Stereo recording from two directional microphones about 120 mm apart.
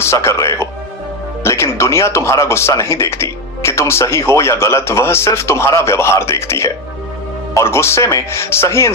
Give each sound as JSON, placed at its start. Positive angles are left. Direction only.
{"t": 0.0, "sound": "speech", "side_deg": 20}